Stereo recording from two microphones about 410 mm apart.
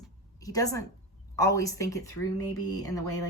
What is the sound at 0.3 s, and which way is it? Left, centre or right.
A woman's voice, centre.